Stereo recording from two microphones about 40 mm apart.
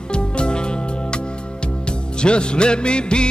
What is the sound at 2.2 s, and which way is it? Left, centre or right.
Music, left.